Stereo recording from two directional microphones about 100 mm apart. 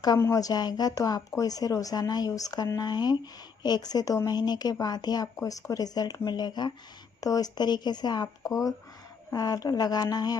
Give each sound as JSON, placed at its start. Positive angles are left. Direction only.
{"t": 0.2, "sound": "speech", "side_deg": 35}